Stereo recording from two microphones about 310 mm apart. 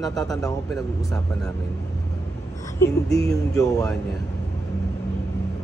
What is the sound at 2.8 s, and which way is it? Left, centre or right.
Speech, centre.